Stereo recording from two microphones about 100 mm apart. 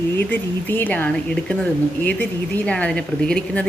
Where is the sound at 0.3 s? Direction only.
20° left (ahead or behind).